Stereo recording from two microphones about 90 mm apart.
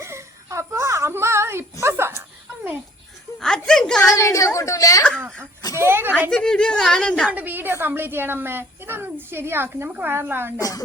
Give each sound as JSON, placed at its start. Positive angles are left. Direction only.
{"t": 0.0, "sound": "a sound", "side_deg": -30}
{"t": 3.6, "sound": "a sound", "side_deg": 5}
{"t": 4.0, "sound": "a woman's voice", "side_deg": 35}
{"t": 5.7, "sound": "a woman's voice", "side_deg": -25}
{"t": 6.3, "sound": "a woman's voice", "side_deg": 10}
{"t": 7.3, "sound": "a woman's voice", "side_deg": -20}
{"t": 10.6, "sound": "a woman's voice", "side_deg": 45}